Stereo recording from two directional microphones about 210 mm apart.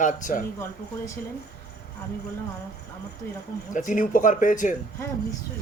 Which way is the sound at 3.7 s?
40° left (ahead or behind).